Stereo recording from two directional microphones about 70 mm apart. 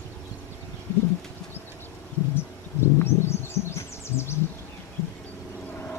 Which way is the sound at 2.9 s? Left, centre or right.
Left.